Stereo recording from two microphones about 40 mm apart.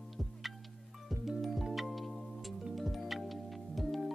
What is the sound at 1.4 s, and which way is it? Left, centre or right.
Music, centre.